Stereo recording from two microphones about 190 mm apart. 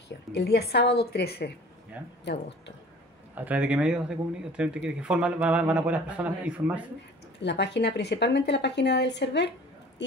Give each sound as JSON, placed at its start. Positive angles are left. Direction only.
{"t": 0.3, "sound": "speech", "side_deg": 55}
{"t": 2.0, "sound": "speech", "side_deg": -10}
{"t": 3.3, "sound": "speech", "side_deg": -10}
{"t": 7.4, "sound": "speech", "side_deg": 65}